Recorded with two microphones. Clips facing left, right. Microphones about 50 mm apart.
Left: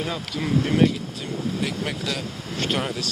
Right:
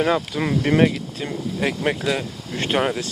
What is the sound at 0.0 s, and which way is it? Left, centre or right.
Speech, right.